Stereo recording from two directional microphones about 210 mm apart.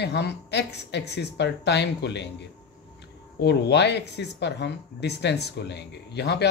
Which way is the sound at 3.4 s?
55° left (ahead or behind).